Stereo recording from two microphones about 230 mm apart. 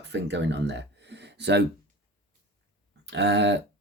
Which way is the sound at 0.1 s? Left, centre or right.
Right.